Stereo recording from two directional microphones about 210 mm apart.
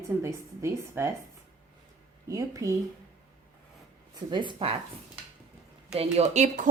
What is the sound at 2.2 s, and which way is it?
Speech, 15° right (ahead or behind).